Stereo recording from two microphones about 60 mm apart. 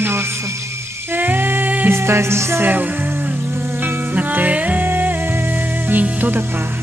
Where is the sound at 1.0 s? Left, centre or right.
Right.